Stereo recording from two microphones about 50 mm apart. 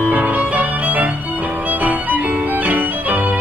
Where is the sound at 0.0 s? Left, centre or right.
Right.